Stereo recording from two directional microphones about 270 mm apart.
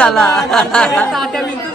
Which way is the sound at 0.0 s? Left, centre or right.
Centre.